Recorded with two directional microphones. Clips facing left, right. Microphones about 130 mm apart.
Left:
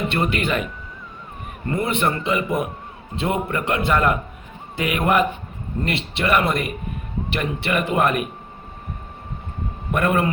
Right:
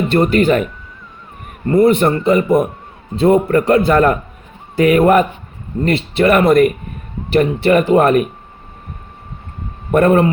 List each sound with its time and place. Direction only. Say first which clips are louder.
0.1 s a man's voice: right 10 dB; 40° right (ahead or behind)
9.9 s a man's voice: right 9 dB; 35° right (ahead or behind)